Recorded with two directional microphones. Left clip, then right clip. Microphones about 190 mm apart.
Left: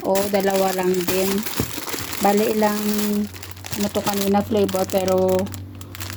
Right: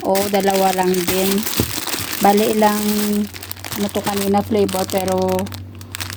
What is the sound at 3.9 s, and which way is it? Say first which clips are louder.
Speech: right 2 dB; 15° right (ahead or behind).